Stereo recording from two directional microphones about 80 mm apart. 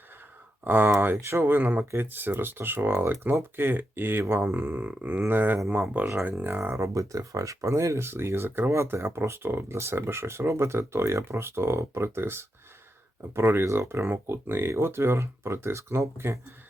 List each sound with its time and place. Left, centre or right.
0.6 s speech: right